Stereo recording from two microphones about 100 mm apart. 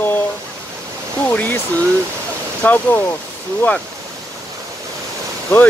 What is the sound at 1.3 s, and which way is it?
Speech, 15° left (ahead or behind).